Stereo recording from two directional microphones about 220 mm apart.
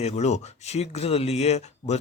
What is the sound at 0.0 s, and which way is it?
Speech, 30° left (ahead or behind).